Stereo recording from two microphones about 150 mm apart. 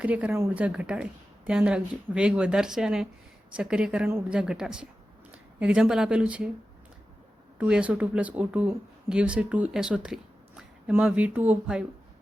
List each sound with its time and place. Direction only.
0.0 s a woman's voice: 10° right (ahead or behind)
7.6 s speech: 10° right (ahead or behind)